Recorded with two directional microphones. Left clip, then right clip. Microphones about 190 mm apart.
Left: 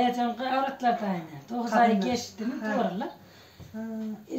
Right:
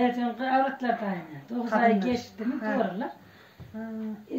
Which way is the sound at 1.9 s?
60° left (ahead or behind).